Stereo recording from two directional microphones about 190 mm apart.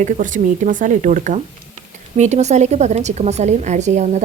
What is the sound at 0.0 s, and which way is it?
A woman's voice, 45° right (ahead or behind).